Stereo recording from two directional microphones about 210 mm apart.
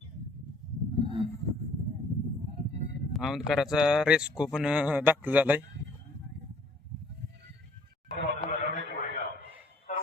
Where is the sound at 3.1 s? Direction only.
Centre (ahead or behind).